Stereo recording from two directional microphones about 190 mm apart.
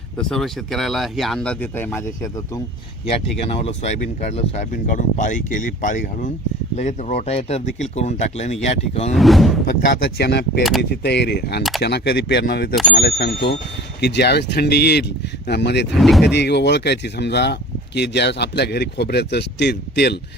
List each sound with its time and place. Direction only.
0.2 s speech: centre (ahead or behind)
3.1 s speech: 30° left (ahead or behind)
9.1 s speech: centre (ahead or behind)
9.8 s speech: 55° left (ahead or behind)
10.6 s speech: centre (ahead or behind)
10.8 s speech: 60° left (ahead or behind)
15.9 s speech: centre (ahead or behind)
16.2 s speech: 65° left (ahead or behind)